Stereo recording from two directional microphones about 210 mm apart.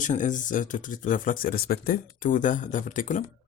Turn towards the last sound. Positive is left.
turn(degrees=40)  # may be behind; listen again after turning